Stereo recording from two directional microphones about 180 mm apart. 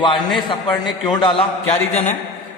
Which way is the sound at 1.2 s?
30° left (ahead or behind).